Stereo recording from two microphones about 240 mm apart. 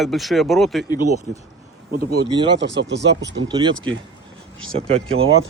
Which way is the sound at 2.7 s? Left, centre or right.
Right.